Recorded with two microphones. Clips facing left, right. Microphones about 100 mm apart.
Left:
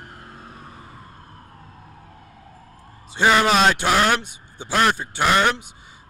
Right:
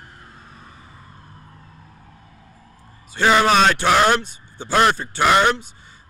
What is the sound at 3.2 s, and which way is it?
Speech, 20° left (ahead or behind).